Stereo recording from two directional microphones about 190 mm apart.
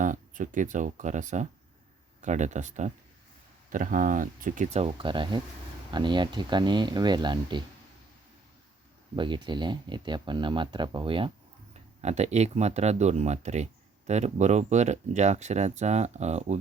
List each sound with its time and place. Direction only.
0.0 s speech: 40° right (ahead or behind); by 7.6 s 25° right (ahead or behind)
9.1 s speech: 25° right (ahead or behind)